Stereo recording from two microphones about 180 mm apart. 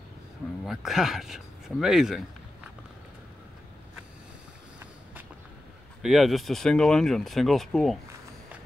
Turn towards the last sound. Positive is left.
turn(degrees=0)  # may be behind; listen again after turning